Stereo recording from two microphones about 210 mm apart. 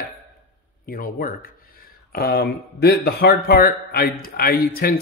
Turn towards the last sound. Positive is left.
turn(degrees=45)  # may be behind; listen again after turning